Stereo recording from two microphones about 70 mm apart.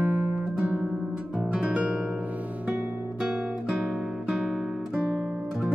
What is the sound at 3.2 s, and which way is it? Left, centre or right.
Guitar, centre.